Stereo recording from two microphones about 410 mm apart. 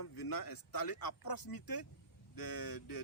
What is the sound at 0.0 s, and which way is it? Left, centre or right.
Speech, left.